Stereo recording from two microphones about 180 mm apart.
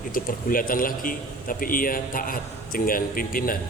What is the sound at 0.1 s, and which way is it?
A man's voice, 50° left (ahead or behind).